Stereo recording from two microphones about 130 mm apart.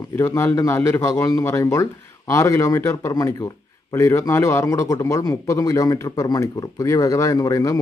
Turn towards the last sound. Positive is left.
turn(degrees=25)  # may be behind; listen again after turning